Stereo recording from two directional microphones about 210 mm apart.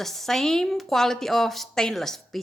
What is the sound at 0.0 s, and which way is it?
A woman's voice, centre (ahead or behind).